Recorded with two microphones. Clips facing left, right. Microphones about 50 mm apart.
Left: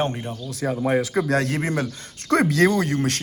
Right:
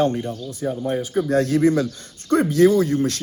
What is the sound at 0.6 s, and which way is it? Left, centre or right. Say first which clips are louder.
Speech: left 2 dB; left.